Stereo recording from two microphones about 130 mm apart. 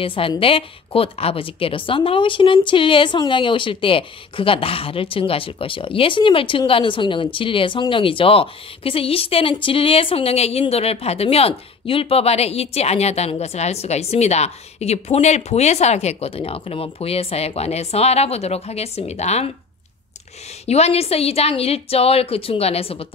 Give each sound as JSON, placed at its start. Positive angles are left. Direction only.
{"t": 0.0, "sound": "a woman's voice", "side_deg": 45}
{"t": 20.6, "sound": "a woman's voice", "side_deg": 55}